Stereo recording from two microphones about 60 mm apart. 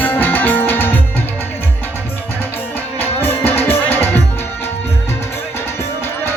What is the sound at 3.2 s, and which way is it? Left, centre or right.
Music, left.